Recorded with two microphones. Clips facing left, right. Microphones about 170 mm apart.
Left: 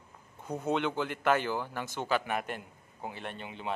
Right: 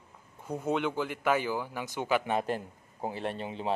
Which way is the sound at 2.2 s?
25° right (ahead or behind).